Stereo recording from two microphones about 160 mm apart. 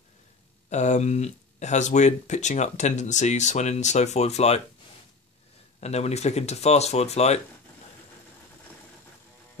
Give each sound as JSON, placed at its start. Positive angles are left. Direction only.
{"t": 0.7, "sound": "speech", "side_deg": 45}
{"t": 5.8, "sound": "speech", "side_deg": 45}